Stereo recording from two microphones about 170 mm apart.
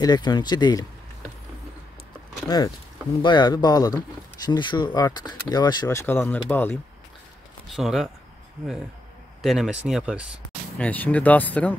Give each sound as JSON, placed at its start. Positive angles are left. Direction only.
{"t": 0.0, "sound": "speech", "side_deg": 25}
{"t": 2.4, "sound": "speech", "side_deg": 20}
{"t": 7.6, "sound": "speech", "side_deg": 0}
{"t": 9.4, "sound": "speech", "side_deg": 0}
{"t": 10.8, "sound": "speech", "side_deg": 10}